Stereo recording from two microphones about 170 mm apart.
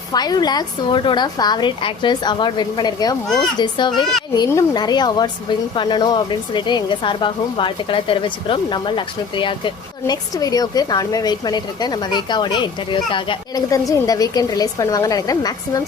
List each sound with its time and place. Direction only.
0.1 s speech: 25° left (ahead or behind)